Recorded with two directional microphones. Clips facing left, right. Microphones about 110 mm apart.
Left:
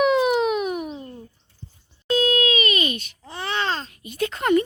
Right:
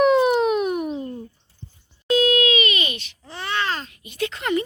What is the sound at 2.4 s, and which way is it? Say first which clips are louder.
Baby cry: right 1 dB; 40° left (ahead or behind).